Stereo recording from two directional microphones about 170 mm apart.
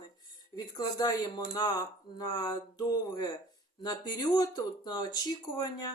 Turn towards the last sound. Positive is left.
turn(degrees=25)  # may be behind; listen again after turning